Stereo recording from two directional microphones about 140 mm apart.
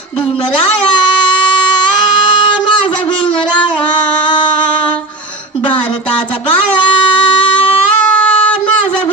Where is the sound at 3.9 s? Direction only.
35° left (ahead or behind).